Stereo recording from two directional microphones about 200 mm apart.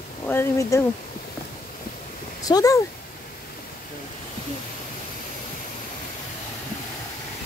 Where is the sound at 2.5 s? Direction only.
15° left (ahead or behind).